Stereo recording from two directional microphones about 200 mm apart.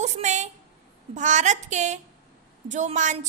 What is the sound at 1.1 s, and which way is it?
A woman's voice, 35° right (ahead or behind).